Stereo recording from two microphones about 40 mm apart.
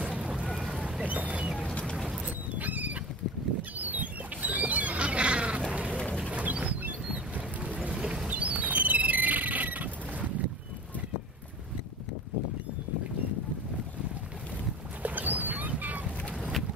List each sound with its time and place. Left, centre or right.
0.0 s vehicle: right
1.0 s speech: right
2.2 s horse: right
3.7 s a sound: right
5.7 s sheep: right
6.3 s a sound: right
7.3 s boat: right
7.9 s music: centre
8.3 s owl: right
15.0 s music: right
15.8 s boat: right